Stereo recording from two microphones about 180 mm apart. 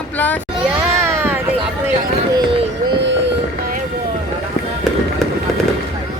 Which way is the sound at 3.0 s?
80° right.